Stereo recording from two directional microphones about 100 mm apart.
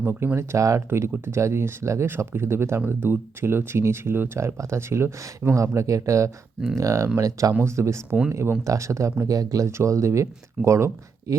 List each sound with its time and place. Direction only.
0.0 s speech: 20° right (ahead or behind)